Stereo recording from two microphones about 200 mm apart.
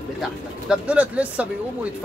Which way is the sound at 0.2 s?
5° right (ahead or behind).